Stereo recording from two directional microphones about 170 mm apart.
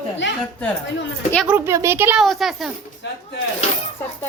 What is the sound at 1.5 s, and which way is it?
Speech, 15° right (ahead or behind).